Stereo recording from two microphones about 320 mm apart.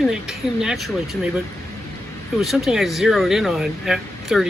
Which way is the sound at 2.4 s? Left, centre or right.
Centre.